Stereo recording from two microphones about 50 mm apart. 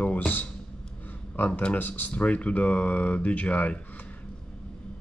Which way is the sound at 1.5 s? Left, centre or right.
Left.